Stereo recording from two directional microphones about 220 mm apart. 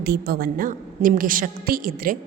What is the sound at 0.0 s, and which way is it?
A woman's voice, 45° right (ahead or behind).